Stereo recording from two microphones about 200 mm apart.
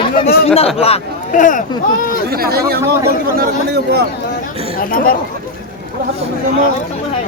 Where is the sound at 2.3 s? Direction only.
50° right (ahead or behind).